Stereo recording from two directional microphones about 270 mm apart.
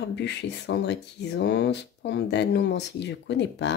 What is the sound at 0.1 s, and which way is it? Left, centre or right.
Speech, left.